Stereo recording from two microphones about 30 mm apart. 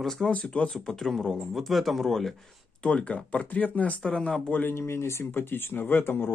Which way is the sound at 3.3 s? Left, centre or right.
Left.